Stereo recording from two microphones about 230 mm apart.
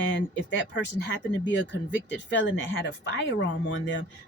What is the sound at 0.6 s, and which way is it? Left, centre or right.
Speech, left.